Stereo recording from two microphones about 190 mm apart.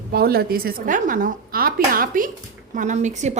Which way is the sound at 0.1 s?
55° right (ahead or behind).